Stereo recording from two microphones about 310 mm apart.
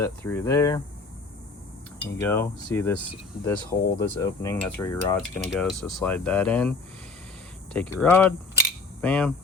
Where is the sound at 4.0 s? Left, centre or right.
Centre.